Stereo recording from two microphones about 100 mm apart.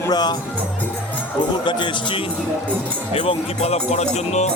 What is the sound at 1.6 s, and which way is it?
Speech, 50° left (ahead or behind).